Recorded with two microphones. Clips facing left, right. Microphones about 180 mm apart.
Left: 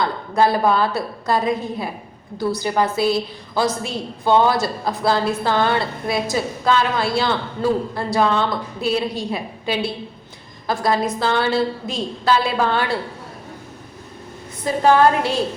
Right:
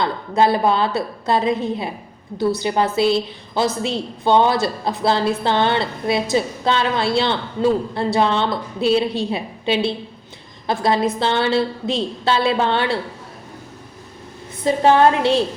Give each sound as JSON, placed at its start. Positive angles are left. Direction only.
{"t": 0.0, "sound": "a woman's voice", "side_deg": -25}
{"t": 14.6, "sound": "a woman's voice", "side_deg": -25}